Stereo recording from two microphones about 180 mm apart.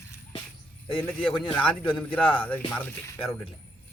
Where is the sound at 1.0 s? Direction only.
10° left (ahead or behind).